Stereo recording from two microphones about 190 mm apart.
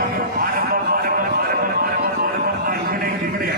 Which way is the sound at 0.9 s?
50° right (ahead or behind).